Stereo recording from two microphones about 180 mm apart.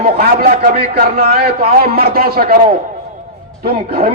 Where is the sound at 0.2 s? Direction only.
55° right (ahead or behind).